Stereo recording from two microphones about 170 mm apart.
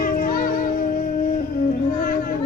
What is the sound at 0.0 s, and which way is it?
Music, 55° left (ahead or behind).